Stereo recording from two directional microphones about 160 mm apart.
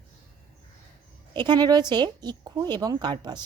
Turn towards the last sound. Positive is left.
turn(degrees=-25)  # may be behind; listen again after turning